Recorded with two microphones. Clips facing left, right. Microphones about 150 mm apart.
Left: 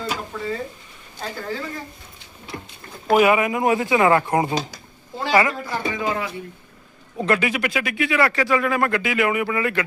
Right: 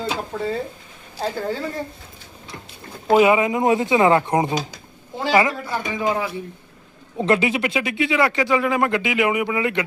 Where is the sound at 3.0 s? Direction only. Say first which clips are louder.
Right 1 dB; 20° right (ahead or behind).